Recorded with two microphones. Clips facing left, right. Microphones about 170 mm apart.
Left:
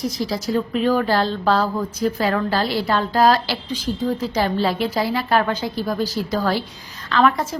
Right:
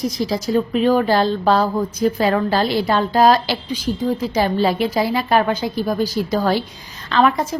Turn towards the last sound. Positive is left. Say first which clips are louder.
# right 1 dB
turn(degrees=-20)  # may be behind; listen again after turning